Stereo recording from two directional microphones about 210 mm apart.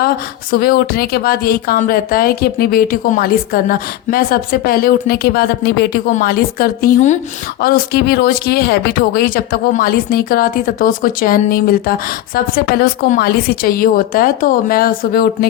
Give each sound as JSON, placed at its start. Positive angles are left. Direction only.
{"t": 0.5, "sound": "speech", "side_deg": 45}